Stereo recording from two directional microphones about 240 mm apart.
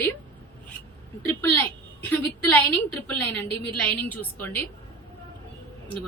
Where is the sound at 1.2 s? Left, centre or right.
Centre.